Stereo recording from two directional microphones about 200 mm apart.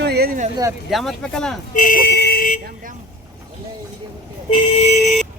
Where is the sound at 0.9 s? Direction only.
Centre (ahead or behind).